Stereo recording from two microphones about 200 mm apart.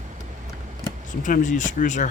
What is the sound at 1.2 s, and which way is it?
Speech, 40° left (ahead or behind).